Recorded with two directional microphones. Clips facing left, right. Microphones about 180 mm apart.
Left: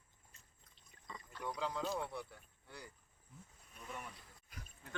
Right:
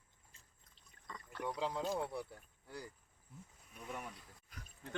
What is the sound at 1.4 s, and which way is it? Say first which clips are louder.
Speech: right 2 dB; 30° right (ahead or behind).